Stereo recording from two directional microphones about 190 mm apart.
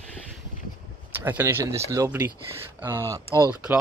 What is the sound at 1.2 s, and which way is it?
Speech, 10° right (ahead or behind).